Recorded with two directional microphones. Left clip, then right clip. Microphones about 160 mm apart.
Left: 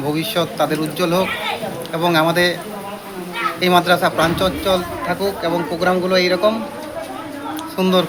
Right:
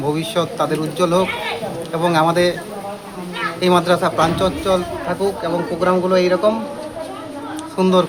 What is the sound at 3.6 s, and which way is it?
Speech, 20° right (ahead or behind).